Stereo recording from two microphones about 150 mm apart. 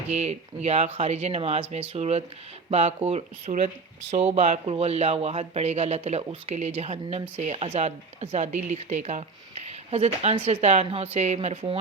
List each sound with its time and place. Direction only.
0.1 s speech: 45° right (ahead or behind)